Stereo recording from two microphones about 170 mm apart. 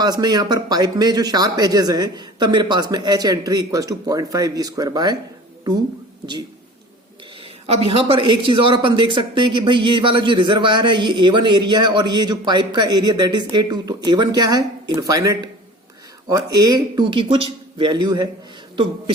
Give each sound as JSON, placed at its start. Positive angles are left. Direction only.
{"t": 0.0, "sound": "a woman's voice", "side_deg": -25}
{"t": 7.4, "sound": "a woman's voice", "side_deg": -35}